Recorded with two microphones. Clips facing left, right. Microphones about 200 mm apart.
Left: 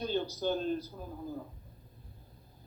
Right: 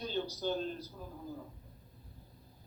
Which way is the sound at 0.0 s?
55° left (ahead or behind).